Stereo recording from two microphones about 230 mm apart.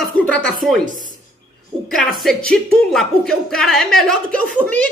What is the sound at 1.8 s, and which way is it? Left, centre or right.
A woman's voice, centre.